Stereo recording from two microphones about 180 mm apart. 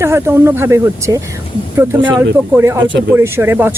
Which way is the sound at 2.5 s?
15° right (ahead or behind).